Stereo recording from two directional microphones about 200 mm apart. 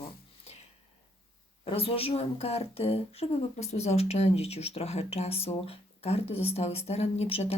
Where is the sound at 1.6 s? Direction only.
30° left (ahead or behind).